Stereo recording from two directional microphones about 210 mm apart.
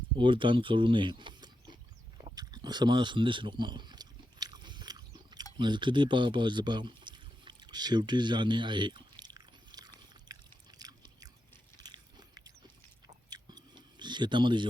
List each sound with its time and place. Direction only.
0.2 s a sound: 25° right (ahead or behind)
5.5 s pour: 20° right (ahead or behind)
11.8 s biting: 20° right (ahead or behind)
13.3 s chewing: 20° right (ahead or behind)